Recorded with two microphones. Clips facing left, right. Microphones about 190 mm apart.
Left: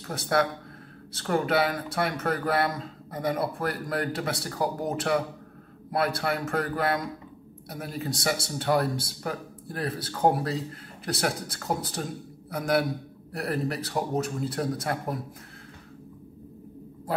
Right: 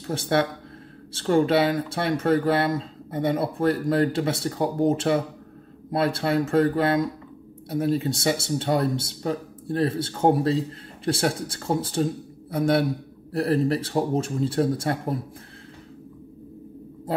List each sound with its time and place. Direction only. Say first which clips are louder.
0.0 s speech: right 3 dB; 25° right (ahead or behind)